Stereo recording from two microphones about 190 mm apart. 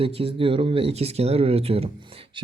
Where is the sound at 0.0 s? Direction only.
30° right (ahead or behind).